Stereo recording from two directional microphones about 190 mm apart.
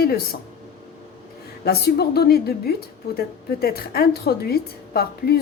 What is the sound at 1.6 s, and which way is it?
A woman's voice, 55° left (ahead or behind).